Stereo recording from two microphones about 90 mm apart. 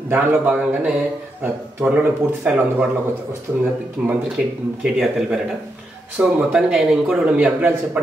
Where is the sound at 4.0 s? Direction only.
10° right (ahead or behind).